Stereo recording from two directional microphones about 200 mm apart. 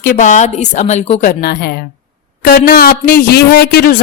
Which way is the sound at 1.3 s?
50° left (ahead or behind).